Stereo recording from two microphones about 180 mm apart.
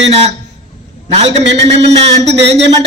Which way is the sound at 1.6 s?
35° right (ahead or behind).